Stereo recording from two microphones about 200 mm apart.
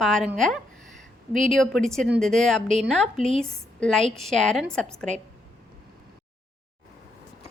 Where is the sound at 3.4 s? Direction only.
5° left (ahead or behind).